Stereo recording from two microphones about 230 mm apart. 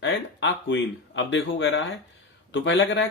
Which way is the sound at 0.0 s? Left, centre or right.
Left.